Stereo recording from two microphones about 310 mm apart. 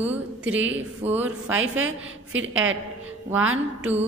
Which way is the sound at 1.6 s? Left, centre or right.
Right.